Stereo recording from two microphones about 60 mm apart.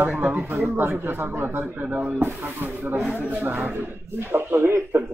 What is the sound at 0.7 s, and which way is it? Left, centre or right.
Speech, right.